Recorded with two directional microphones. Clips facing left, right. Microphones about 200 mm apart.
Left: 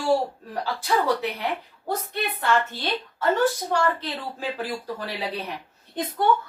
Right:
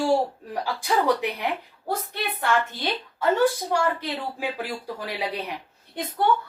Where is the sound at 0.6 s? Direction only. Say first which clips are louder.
Even; 15° right (ahead or behind).